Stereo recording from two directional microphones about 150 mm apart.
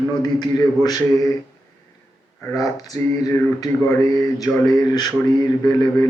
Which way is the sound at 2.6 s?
25° left (ahead or behind).